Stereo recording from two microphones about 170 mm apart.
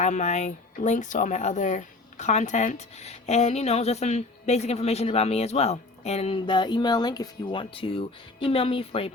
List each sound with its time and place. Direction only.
0.0 s speech: 45° left (ahead or behind)